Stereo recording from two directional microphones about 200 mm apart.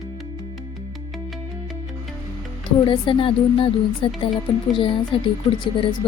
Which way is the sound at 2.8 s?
25° left (ahead or behind).